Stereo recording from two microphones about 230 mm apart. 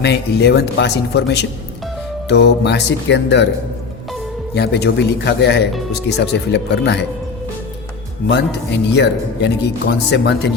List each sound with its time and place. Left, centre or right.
0.0 s speech: left
4.5 s speech: left
8.3 s speech: left